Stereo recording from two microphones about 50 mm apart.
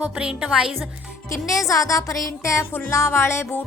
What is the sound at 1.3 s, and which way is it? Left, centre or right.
Speech, left.